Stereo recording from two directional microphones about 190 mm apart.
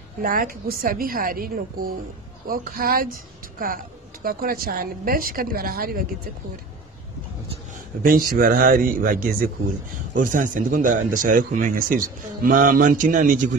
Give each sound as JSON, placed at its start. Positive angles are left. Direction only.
{"t": 0.2, "sound": "a woman's voice", "side_deg": -50}
{"t": 8.0, "sound": "a woman's voice", "side_deg": -50}